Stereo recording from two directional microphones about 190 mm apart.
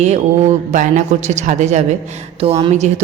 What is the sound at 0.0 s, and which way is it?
A woman's voice, 35° right (ahead or behind).